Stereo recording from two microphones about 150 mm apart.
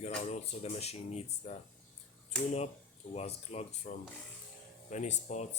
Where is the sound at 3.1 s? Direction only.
45° left (ahead or behind).